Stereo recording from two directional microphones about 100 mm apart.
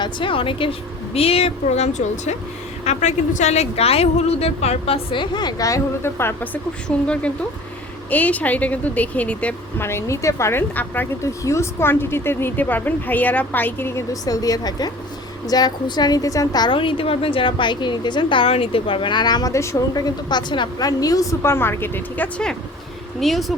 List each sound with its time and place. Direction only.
0.0 s a woman's voice: 60° left (ahead or behind); by 4.9 s 90° left
5.1 s a woman's voice: 50° left (ahead or behind); by 9.6 s 15° left (ahead or behind)
9.7 s speech: 25° left (ahead or behind)
11.2 s speech: 30° left (ahead or behind)
14.1 s a woman's voice: 40° left (ahead or behind)
16.7 s a woman's voice: 60° left (ahead or behind); by 19.8 s 30° left (ahead or behind)
19.9 s a woman's voice: 45° left (ahead or behind); by 22.3 s 20° left (ahead or behind)
23.2 s a woman's voice: centre (ahead or behind)